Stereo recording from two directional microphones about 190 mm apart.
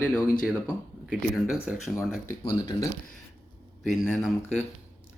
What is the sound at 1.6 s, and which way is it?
Speech, 5° right (ahead or behind).